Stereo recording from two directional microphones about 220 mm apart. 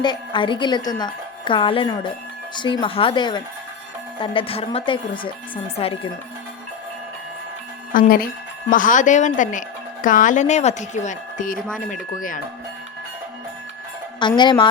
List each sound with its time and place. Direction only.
0.0 s a woman's voice: 20° left (ahead or behind)
7.9 s speech: 40° left (ahead or behind)
14.2 s a woman's voice: 20° left (ahead or behind)